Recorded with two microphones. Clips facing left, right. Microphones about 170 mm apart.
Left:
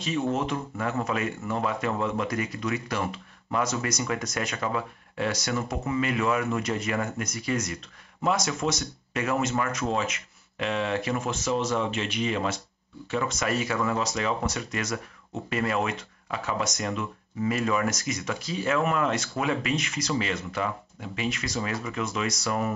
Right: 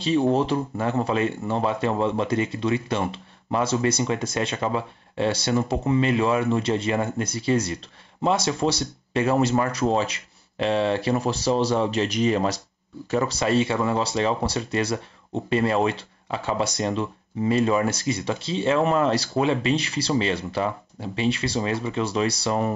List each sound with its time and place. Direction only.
0.0 s speech: 30° right (ahead or behind)